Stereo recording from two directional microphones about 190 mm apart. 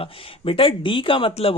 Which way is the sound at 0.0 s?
30° left (ahead or behind).